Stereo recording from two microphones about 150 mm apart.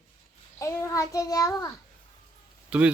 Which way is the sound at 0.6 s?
20° left (ahead or behind).